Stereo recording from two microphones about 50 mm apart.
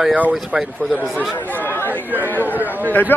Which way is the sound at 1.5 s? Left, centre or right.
Left.